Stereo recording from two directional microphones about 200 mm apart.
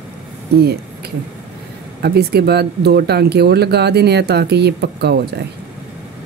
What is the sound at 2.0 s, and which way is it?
Speech, 55° right (ahead or behind).